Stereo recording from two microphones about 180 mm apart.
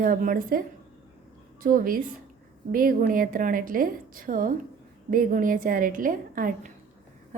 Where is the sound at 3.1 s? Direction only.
50° right (ahead or behind).